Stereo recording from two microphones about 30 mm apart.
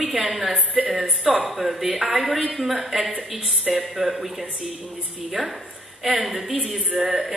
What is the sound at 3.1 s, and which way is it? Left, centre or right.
Speech, right.